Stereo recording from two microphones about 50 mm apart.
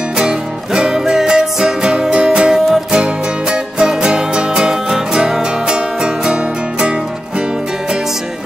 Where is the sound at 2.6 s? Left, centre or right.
Centre.